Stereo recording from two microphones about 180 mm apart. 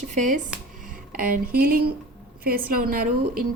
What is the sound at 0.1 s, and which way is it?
A woman's voice, 45° right (ahead or behind).